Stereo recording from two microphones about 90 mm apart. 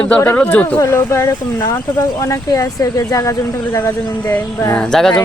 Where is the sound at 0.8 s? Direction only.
30° left (ahead or behind).